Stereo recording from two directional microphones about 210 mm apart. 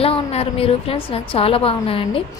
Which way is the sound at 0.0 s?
30° left (ahead or behind).